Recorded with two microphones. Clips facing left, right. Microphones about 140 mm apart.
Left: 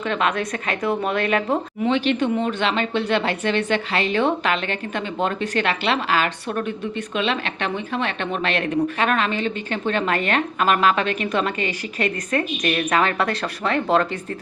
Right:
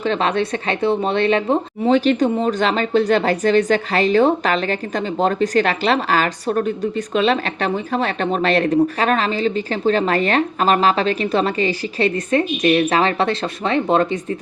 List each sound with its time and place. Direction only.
0.0 s speech: 30° right (ahead or behind)
1.9 s speech: 40° right (ahead or behind); by 14.3 s 20° right (ahead or behind)